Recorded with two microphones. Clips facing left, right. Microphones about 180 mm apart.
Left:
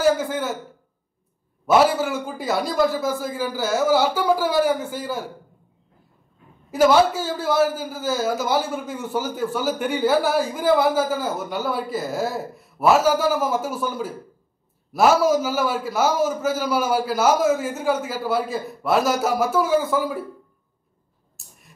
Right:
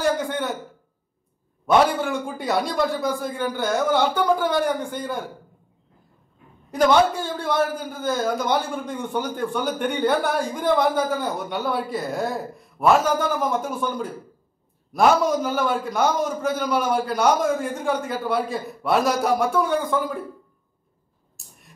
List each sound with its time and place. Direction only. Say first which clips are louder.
0.0 s a man's voice: left 3 dB; centre (ahead or behind)
1.7 s a man's voice: left 1 dB; 5° left (ahead or behind)
6.7 s a man's voice: left 2 dB; 5° left (ahead or behind)
21.4 s a sound: right 1 dB; centre (ahead or behind)